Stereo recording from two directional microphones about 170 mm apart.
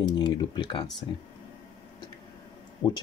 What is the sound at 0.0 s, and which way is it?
Speech, 25° left (ahead or behind).